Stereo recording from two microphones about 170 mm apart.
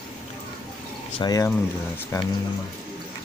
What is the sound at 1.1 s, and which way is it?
Speech, 25° left (ahead or behind).